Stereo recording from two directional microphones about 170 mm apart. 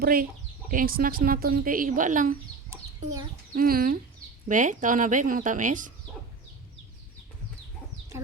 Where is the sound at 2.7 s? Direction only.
20° right (ahead or behind).